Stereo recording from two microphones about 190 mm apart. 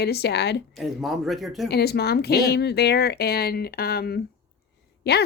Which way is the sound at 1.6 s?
55° left (ahead or behind).